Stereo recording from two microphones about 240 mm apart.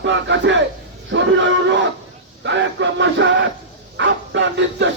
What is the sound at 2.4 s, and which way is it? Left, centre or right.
Music, right.